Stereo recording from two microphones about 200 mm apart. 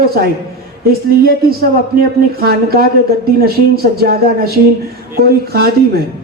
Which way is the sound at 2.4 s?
50° right (ahead or behind).